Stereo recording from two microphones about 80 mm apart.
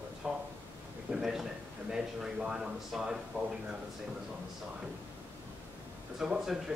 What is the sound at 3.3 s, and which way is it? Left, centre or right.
Speech, right.